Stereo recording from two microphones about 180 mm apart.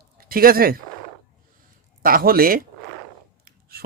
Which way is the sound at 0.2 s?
55° right (ahead or behind).